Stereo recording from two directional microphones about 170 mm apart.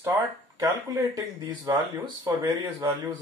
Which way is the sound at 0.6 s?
20° right (ahead or behind).